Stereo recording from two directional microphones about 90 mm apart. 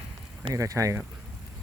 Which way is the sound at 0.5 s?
35° right (ahead or behind).